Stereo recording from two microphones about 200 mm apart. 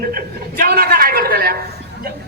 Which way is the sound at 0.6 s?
50° right (ahead or behind).